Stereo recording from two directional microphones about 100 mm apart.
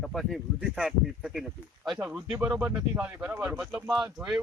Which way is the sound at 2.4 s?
5° right (ahead or behind).